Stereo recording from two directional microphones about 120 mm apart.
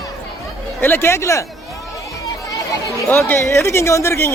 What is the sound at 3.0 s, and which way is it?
Speech, 20° left (ahead or behind).